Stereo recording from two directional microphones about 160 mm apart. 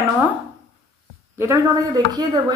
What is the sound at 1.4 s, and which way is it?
A woman's voice, 20° right (ahead or behind).